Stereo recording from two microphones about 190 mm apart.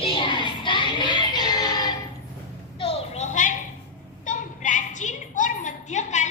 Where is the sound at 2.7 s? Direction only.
30° left (ahead or behind).